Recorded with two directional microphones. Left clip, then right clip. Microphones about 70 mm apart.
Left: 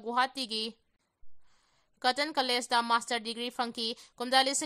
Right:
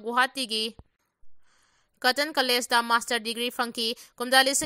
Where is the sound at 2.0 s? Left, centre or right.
Right.